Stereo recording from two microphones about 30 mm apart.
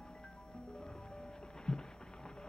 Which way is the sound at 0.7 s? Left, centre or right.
Left.